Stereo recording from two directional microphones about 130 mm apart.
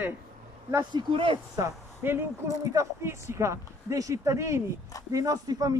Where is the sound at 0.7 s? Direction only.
35° right (ahead or behind).